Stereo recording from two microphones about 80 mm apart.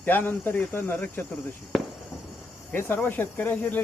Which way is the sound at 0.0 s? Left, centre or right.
Left.